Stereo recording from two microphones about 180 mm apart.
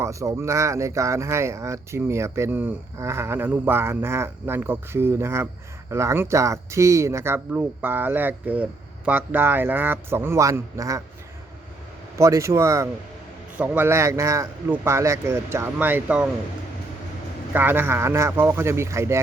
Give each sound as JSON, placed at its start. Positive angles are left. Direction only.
{"t": 0.0, "sound": "speech", "side_deg": -15}
{"t": 12.1, "sound": "speech", "side_deg": -15}
{"t": 17.5, "sound": "speech", "side_deg": -10}